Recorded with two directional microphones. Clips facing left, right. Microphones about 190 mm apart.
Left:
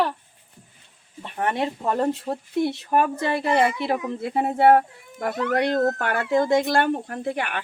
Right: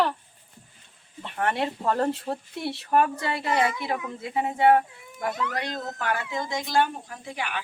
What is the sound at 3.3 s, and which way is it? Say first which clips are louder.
Speech: left 5 dB; 60° left (ahead or behind).